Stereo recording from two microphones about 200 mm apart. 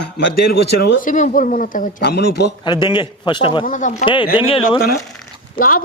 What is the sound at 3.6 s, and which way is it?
Speech, 40° left (ahead or behind).